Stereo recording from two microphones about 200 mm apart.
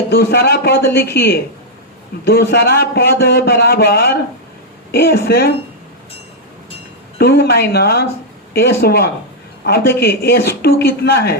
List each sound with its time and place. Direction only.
0.1 s speech: 50° left (ahead or behind)
7.2 s speech: 55° left (ahead or behind)